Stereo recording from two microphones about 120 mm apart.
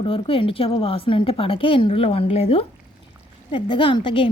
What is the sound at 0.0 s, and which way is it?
A woman's voice, 50° left (ahead or behind).